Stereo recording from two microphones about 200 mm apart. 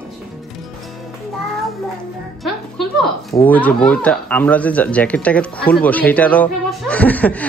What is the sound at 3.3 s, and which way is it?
Speech, 10° left (ahead or behind).